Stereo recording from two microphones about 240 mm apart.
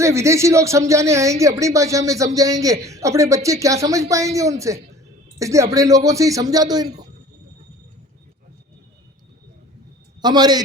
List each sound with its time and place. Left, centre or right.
0.0 s speech: centre
10.2 s a man's voice: centre